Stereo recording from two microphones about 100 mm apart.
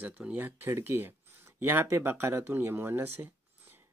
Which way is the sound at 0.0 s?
15° right (ahead or behind).